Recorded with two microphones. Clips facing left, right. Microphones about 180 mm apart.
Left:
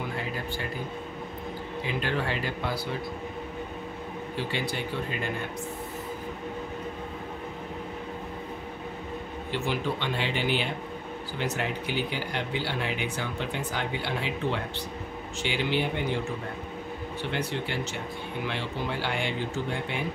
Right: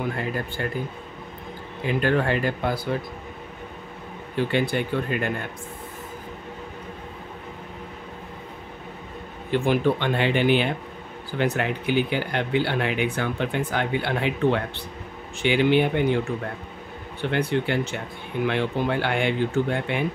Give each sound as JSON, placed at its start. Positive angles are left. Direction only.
{"t": 1.9, "sound": "speech", "side_deg": -55}
{"t": 4.4, "sound": "speech", "side_deg": -55}
{"t": 9.5, "sound": "speech", "side_deg": -55}
{"t": 17.2, "sound": "speech", "side_deg": -55}